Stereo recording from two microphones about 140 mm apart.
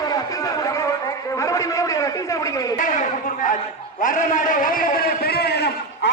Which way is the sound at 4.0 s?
70° left (ahead or behind).